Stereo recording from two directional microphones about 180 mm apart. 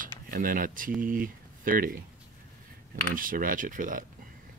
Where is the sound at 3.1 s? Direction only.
50° right (ahead or behind).